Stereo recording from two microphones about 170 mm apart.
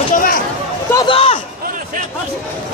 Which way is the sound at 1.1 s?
35° left (ahead or behind).